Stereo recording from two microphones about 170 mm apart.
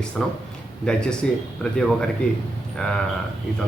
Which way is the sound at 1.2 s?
5° left (ahead or behind).